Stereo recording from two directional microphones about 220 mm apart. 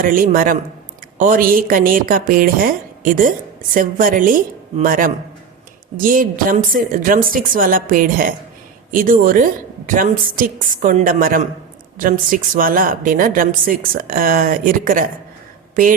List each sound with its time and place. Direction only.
0.0 s a woman's voice: 40° right (ahead or behind)